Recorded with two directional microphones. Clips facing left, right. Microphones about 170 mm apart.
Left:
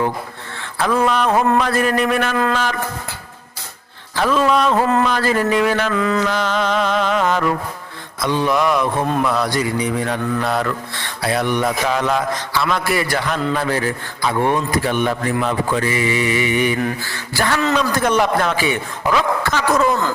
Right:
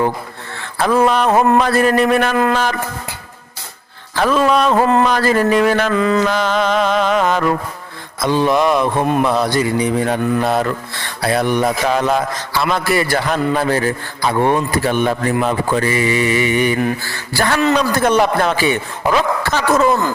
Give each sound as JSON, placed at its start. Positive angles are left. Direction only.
{"t": 0.8, "sound": "a man's voice", "side_deg": -35}
{"t": 4.1, "sound": "music", "side_deg": -50}
{"t": 6.0, "sound": "a sound", "side_deg": -25}
{"t": 6.2, "sound": "music", "side_deg": -50}
{"t": 8.2, "sound": "a sound", "side_deg": -35}
{"t": 11.2, "sound": "a man's voice", "side_deg": -35}